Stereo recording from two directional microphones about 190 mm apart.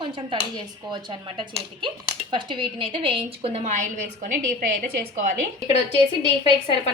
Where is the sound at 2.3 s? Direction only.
25° right (ahead or behind); by 5.4 s 45° right (ahead or behind).